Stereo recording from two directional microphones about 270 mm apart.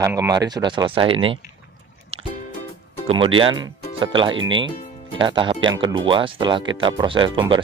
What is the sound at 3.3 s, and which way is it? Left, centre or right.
Speech, centre.